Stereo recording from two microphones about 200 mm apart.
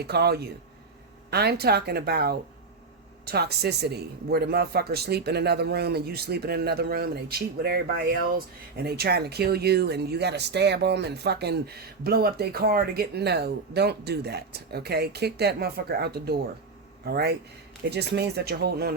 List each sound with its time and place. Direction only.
0.0 s speech: 55° right (ahead or behind)